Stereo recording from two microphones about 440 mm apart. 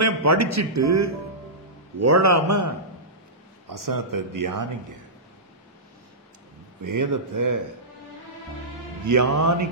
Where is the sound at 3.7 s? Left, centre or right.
Right.